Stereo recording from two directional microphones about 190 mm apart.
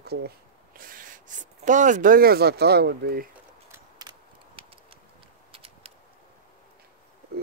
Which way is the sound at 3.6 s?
20° right (ahead or behind).